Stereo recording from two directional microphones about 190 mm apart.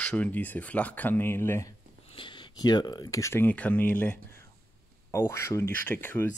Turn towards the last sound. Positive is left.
turn(degrees=10)  # may be behind; listen again after turning